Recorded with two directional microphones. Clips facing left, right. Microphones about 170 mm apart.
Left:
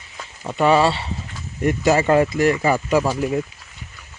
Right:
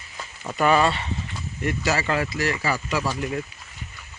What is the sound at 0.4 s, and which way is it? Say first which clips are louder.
Speech: left 4 dB; 25° left (ahead or behind).